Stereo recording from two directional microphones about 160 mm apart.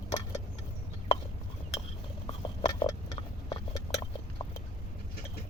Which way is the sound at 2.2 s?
30° left (ahead or behind).